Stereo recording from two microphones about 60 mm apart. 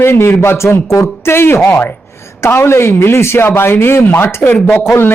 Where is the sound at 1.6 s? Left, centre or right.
Left.